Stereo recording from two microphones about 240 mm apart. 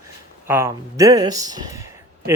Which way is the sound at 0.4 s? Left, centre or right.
Centre.